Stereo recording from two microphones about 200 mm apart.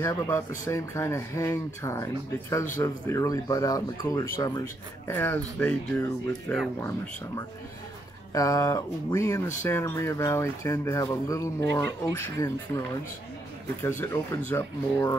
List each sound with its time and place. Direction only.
0.0 s speech: 15° left (ahead or behind)
13.8 s speech: 10° left (ahead or behind)